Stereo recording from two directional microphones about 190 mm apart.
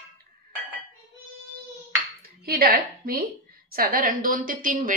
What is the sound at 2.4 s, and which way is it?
A woman's voice, 55° right (ahead or behind).